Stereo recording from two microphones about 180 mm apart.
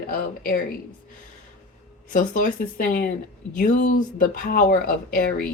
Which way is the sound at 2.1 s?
50° left (ahead or behind).